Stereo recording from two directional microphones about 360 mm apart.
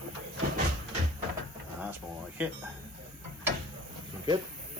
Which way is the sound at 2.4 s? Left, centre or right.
Centre.